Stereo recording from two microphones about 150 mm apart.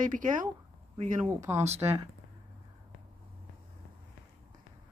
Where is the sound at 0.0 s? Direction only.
60° right (ahead or behind).